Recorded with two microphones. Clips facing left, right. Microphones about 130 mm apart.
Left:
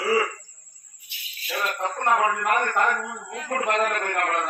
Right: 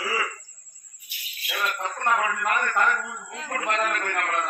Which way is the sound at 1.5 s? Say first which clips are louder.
Left 2 dB; 35° left (ahead or behind).